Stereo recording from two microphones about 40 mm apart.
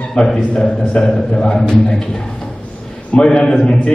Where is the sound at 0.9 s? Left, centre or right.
Left.